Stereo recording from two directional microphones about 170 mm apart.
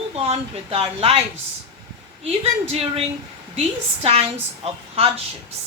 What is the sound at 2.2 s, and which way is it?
Speech, 35° right (ahead or behind).